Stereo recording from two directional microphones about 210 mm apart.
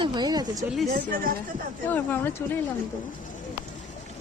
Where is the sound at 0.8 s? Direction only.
45° right (ahead or behind).